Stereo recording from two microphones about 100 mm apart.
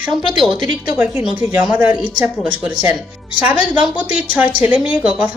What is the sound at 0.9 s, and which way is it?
A woman's voice, 15° right (ahead or behind).